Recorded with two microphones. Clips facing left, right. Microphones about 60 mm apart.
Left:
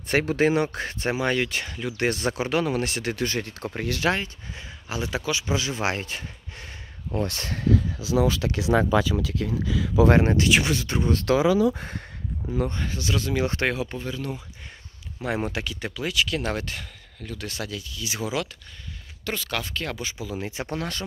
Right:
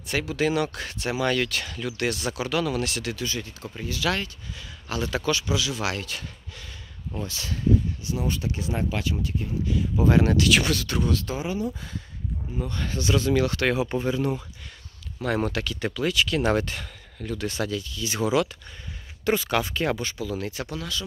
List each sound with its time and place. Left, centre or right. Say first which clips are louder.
0.1 s speech: left 4 dB; left
2.0 s speech: left 3 dB; left
4.1 s speech: left 2 dB; left
5.5 s speech: left 1 dB; left
7.2 s speech: left 5 dB; left
7.6 s speech: even; left
10.2 s speech: even; left
11.2 s speech: left 9 dB; left
12.8 s speech: right 4 dB; centre
13.7 s speech: right 5 dB; centre
15.2 s speech: right 2 dB; centre
19.2 s speech: right 6 dB; centre
20.0 s speech: right 2 dB; centre
20.6 s speech: left 2 dB; left